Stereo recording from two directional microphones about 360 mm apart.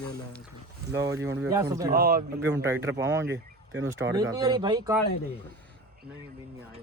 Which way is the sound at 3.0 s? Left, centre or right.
Centre.